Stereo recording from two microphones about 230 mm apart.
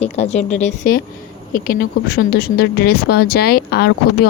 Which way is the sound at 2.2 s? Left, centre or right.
Left.